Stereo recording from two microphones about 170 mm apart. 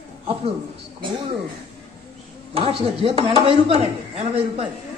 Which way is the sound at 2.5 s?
35° right (ahead or behind).